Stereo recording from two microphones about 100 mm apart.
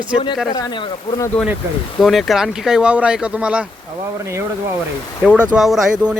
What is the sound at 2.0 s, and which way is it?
Speech, centre (ahead or behind).